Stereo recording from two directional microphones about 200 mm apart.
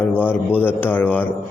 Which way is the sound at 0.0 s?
10° left (ahead or behind).